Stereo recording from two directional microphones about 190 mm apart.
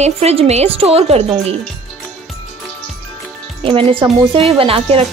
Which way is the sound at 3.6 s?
30° right (ahead or behind).